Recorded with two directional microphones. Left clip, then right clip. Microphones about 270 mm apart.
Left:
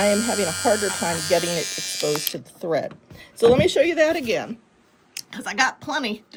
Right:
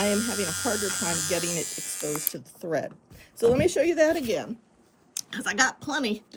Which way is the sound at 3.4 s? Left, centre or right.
Centre.